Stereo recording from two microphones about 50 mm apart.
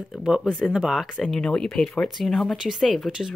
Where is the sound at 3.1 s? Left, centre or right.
Centre.